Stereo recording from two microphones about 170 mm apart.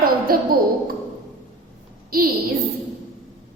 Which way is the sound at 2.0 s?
60° right (ahead or behind).